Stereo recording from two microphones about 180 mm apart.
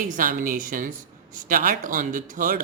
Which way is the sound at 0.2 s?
50° right (ahead or behind).